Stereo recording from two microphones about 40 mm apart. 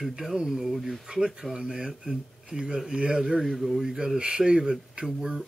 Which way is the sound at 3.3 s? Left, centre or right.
Centre.